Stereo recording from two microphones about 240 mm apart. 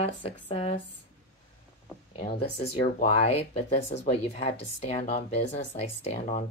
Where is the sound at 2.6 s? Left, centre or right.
Left.